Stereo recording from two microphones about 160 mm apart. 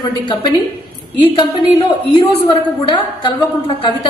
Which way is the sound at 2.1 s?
30° left (ahead or behind).